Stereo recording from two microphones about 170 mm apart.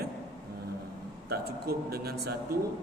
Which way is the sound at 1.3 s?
65° right (ahead or behind).